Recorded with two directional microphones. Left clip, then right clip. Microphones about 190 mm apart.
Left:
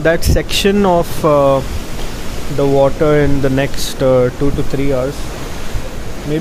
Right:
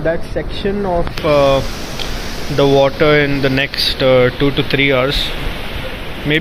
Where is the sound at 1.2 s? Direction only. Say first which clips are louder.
Right 1 dB; 25° left (ahead or behind).